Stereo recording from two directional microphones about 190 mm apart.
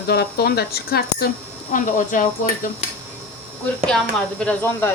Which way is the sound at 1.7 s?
45° left (ahead or behind).